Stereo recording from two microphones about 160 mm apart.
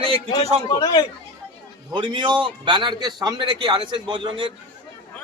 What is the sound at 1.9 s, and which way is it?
A man's voice, 30° right (ahead or behind).